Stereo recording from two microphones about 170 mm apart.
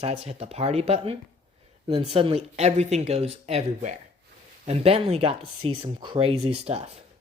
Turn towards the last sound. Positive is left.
turn(degrees=-40)  # may be behind; listen again after turning